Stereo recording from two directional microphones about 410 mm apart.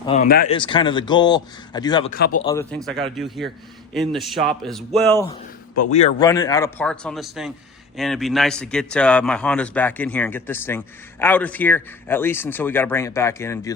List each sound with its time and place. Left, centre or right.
0.0 s speech: centre
2.1 s speech: left
2.4 s a man's voice: centre